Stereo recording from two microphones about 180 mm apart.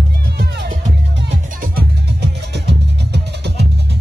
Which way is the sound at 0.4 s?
65° right (ahead or behind).